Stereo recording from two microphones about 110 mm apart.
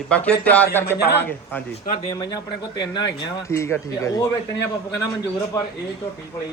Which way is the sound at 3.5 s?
25° left (ahead or behind).